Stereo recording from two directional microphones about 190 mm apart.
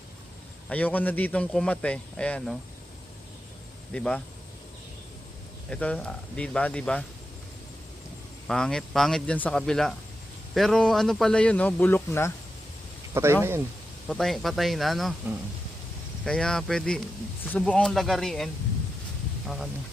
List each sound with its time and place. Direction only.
0.7 s speech: 10° left (ahead or behind)
3.9 s speech: 5° left (ahead or behind)
5.7 s speech: 5° left (ahead or behind)
8.4 s speech: 5° left (ahead or behind)
13.2 s speech: 10° right (ahead or behind)
14.1 s speech: centre (ahead or behind)
16.2 s speech: 5° left (ahead or behind)